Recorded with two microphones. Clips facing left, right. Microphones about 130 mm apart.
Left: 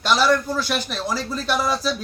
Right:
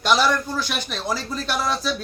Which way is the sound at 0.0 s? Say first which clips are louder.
Left 1 dB; centre (ahead or behind).